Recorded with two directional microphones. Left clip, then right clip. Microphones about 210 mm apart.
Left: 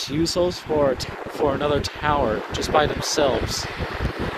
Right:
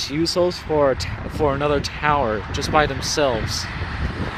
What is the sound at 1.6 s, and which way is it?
Speech, 5° left (ahead or behind).